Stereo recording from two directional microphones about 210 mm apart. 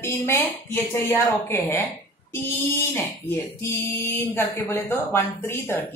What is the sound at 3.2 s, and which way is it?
Speech, 10° left (ahead or behind).